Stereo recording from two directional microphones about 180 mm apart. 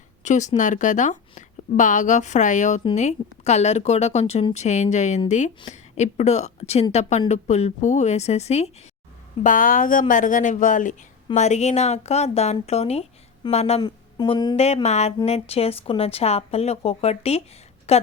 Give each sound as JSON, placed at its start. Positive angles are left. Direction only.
{"t": 0.3, "sound": "a woman's voice", "side_deg": 40}
{"t": 9.4, "sound": "a woman's voice", "side_deg": 50}
{"t": 13.8, "sound": "speech", "side_deg": 25}
{"t": 14.5, "sound": "a woman's voice", "side_deg": 35}